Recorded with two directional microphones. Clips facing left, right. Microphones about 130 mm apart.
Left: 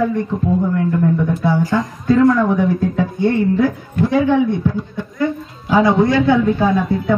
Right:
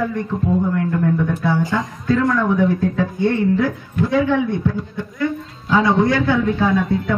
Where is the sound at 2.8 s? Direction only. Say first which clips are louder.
Left 1 dB; 25° left (ahead or behind).